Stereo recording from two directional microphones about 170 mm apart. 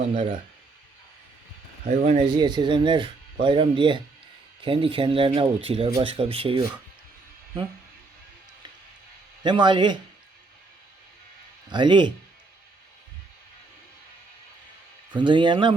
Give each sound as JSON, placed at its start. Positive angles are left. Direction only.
{"t": 1.9, "sound": "speech", "side_deg": -45}
{"t": 2.2, "sound": "speech", "side_deg": -25}
{"t": 9.4, "sound": "speech", "side_deg": -25}
{"t": 11.7, "sound": "speech", "side_deg": -25}
{"t": 15.1, "sound": "speech", "side_deg": -25}